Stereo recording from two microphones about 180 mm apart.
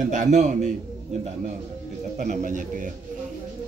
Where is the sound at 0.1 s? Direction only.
45° right (ahead or behind).